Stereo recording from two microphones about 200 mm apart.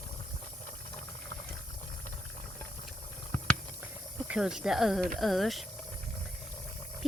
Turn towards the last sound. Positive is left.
turn(degrees=0)  # may be behind; listen again after turning